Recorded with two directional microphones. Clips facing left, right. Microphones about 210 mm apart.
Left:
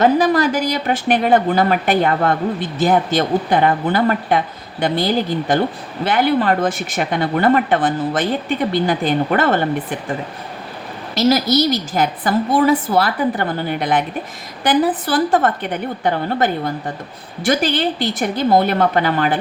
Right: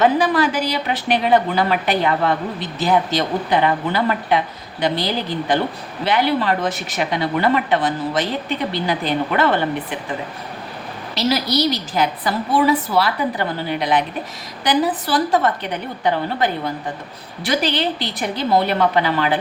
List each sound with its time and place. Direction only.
0.0 s a woman's voice: 40° left (ahead or behind)
11.1 s a woman's voice: 45° left (ahead or behind)